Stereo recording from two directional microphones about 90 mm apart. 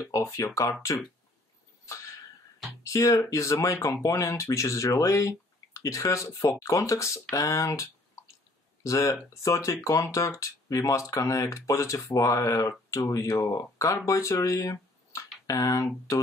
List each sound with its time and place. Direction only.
0.0 s speech: 30° left (ahead or behind)
2.8 s speech: 35° left (ahead or behind)